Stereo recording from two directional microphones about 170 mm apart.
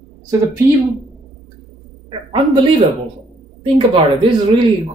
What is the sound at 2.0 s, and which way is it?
Speech, 30° right (ahead or behind).